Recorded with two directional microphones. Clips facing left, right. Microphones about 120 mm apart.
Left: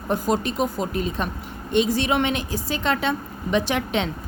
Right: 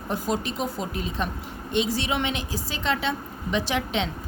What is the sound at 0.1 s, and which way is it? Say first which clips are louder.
A woman's voice: left 5 dB; 50° left (ahead or behind).